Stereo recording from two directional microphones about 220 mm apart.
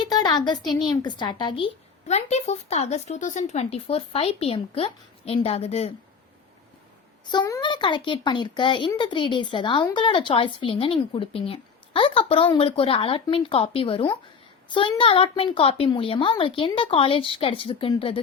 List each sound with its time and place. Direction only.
0.1 s a sound: 20° left (ahead or behind)
0.8 s a child's voice: 20° left (ahead or behind)
7.3 s a child's voice: 15° left (ahead or behind)